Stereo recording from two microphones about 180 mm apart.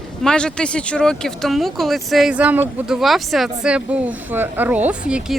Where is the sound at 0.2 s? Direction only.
5° left (ahead or behind).